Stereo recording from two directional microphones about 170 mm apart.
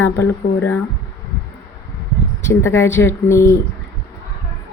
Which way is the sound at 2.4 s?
15° left (ahead or behind).